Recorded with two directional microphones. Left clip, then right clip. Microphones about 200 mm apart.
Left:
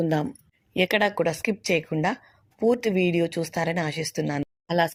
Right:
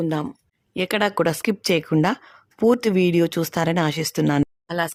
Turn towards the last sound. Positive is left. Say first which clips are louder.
# left 1 dB
turn(degrees=0)  # may be behind; listen again after turning